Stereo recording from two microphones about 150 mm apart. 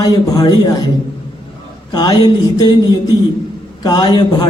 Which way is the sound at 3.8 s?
25° left (ahead or behind).